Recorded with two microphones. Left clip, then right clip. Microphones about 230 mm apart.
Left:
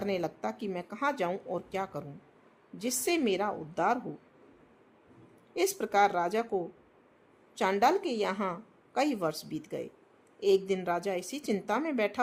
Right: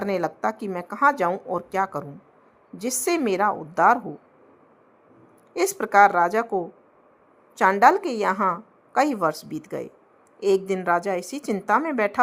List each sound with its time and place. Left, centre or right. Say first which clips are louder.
0.0 s a woman's voice: right 8 dB; centre
5.5 s a woman's voice: right 9 dB; centre